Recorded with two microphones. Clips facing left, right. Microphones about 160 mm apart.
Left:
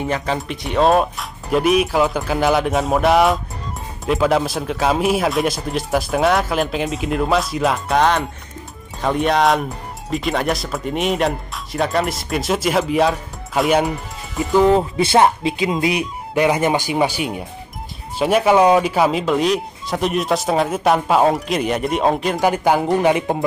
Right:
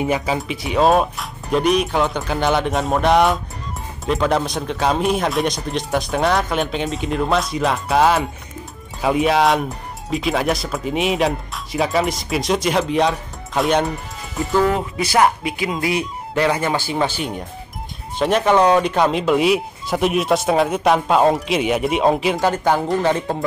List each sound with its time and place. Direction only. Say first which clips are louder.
0.0 s speech: right 1 dB; 10° right (ahead or behind)
14.7 s speech: left 5 dB; 30° left (ahead or behind); by 22.4 s centre (ahead or behind)
22.4 s speech: left 1 dB; 10° left (ahead or behind)